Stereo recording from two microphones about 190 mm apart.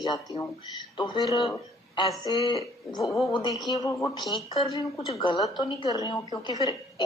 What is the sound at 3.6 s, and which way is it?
Speech, 20° left (ahead or behind).